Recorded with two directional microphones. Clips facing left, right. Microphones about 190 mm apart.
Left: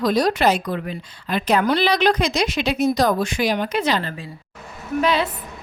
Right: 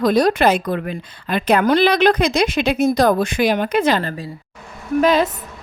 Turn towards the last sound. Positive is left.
turn(degrees=-45)  # may be behind; listen again after turning